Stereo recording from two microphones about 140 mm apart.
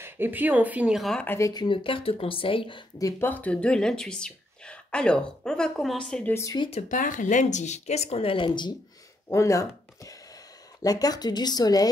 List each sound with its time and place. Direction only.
0.0 s speech: 15° right (ahead or behind)
1.2 s speech: 15° left (ahead or behind)
1.5 s speech: 35° left (ahead or behind)
3.0 s speech: 20° left (ahead or behind)
6.3 s speech: 20° left (ahead or behind)
6.9 s speech: 70° left (ahead or behind); by 8.7 s 35° left (ahead or behind)
9.3 s speech: 20° left (ahead or behind)